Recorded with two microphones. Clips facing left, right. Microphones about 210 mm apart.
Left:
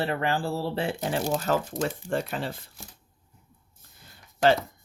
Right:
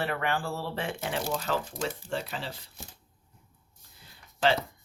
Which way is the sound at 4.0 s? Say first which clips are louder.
Left 4 dB; 45° left (ahead or behind).